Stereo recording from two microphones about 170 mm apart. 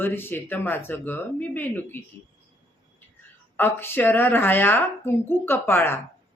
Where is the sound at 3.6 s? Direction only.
10° left (ahead or behind).